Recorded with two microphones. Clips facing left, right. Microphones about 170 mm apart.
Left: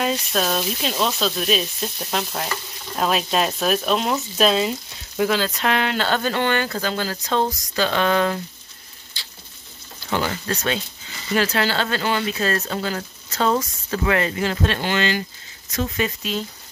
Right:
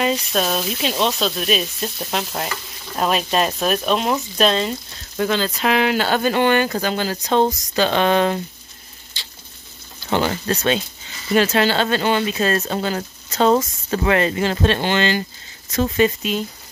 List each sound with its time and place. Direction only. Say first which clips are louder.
0.0 s sizzle: right 2 dB; centre (ahead or behind)
3.0 s speech: right 2 dB; centre (ahead or behind); by 8.4 s 25° right (ahead or behind)
10.0 s speech: right 4 dB; 30° right (ahead or behind)
16.2 s speech: right 3 dB; 15° right (ahead or behind)